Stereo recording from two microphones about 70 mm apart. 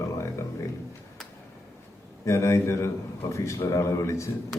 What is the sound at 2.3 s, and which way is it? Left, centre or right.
A man's voice, left.